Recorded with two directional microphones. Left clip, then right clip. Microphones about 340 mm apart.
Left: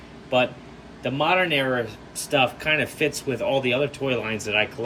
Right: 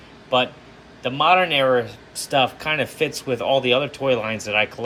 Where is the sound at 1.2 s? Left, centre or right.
Centre.